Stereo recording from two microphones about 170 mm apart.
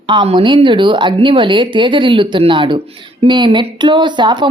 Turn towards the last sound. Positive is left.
turn(degrees=-25)  # may be behind; listen again after turning